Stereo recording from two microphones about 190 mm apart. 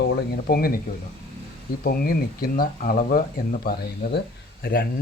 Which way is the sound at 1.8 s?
50° left (ahead or behind).